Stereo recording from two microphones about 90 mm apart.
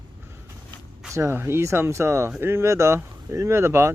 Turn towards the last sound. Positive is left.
turn(degrees=-30)  # may be behind; listen again after turning